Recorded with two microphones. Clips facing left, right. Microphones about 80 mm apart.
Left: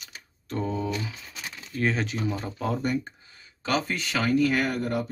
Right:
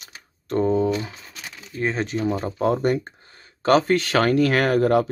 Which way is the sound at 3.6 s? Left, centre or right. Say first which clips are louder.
Right 10 dB; right.